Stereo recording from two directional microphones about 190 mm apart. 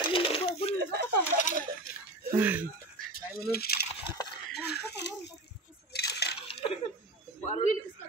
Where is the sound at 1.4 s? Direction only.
45° left (ahead or behind).